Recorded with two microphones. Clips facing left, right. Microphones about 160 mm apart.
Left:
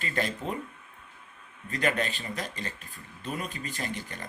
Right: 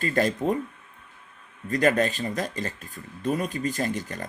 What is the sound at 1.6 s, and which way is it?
Speech, 40° right (ahead or behind).